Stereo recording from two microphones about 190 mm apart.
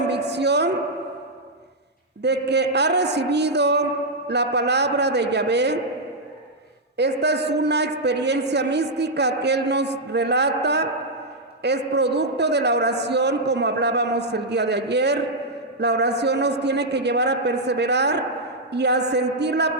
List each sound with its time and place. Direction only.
0.1 s a sound: 60° right (ahead or behind)
2.2 s a man's voice: 60° right (ahead or behind)
6.9 s a man's voice: 60° right (ahead or behind)